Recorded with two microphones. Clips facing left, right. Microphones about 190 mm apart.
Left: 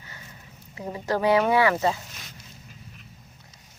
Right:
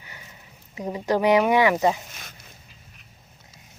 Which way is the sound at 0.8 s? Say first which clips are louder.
Right 3 dB; 15° right (ahead or behind).